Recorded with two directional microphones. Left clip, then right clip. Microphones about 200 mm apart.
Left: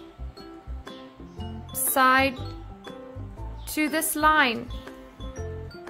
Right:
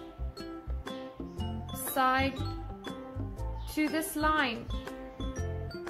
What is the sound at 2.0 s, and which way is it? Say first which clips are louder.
Speech: left 8 dB; 50° left (ahead or behind).